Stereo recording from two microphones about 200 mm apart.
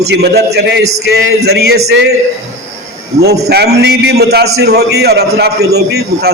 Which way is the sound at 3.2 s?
55° right (ahead or behind).